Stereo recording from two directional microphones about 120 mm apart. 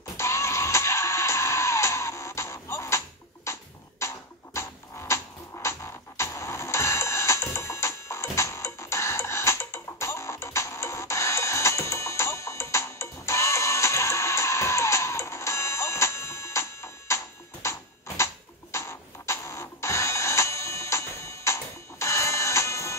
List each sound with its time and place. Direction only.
0.2 s music: 25° left (ahead or behind)